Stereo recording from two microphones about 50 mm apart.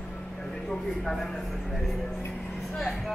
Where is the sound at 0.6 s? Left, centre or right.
Centre.